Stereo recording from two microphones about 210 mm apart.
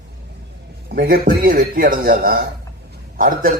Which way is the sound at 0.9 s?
45° right (ahead or behind).